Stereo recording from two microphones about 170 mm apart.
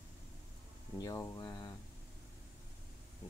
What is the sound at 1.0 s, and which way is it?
Speech, 20° left (ahead or behind).